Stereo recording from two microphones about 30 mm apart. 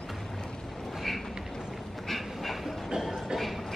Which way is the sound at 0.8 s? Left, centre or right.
Centre.